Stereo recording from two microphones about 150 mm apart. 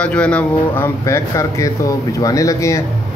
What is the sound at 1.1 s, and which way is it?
Speech, 20° left (ahead or behind).